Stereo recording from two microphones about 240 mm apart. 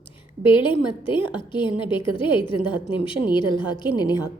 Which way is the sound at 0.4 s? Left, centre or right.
Left.